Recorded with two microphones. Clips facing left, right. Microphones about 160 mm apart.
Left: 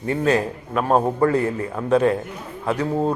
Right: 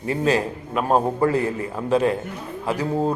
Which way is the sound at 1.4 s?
30° right (ahead or behind).